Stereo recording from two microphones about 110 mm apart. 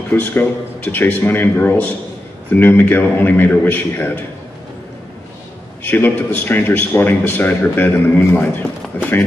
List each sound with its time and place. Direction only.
0.1 s a man's voice: 20° left (ahead or behind)
5.9 s a man's voice: 20° left (ahead or behind)